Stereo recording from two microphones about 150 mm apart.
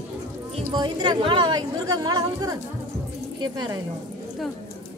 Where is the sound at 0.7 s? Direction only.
30° right (ahead or behind).